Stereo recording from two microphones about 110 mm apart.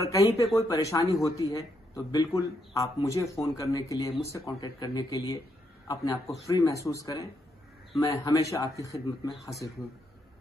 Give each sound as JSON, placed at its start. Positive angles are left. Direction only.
{"t": 0.0, "sound": "a man's voice", "side_deg": 30}